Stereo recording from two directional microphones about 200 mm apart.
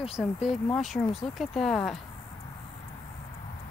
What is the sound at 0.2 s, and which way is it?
Speech, centre (ahead or behind).